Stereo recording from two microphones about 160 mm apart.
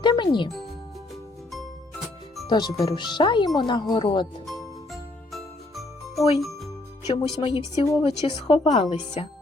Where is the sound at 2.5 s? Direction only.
25° left (ahead or behind).